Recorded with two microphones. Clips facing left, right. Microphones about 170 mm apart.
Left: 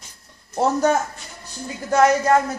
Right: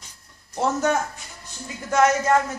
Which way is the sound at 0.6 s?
35° left (ahead or behind).